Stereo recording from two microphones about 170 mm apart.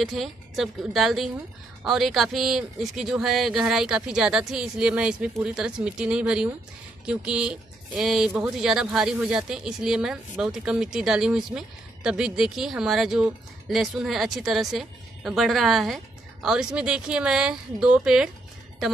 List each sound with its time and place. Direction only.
0.0 s speech: centre (ahead or behind)